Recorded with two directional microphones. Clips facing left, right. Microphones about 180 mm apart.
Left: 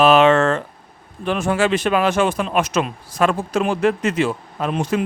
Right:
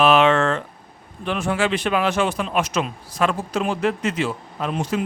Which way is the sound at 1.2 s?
45° left (ahead or behind).